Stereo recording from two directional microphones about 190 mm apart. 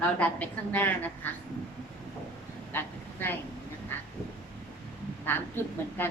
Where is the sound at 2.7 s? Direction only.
10° left (ahead or behind).